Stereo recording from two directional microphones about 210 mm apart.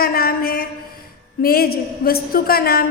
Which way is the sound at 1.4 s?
45° left (ahead or behind).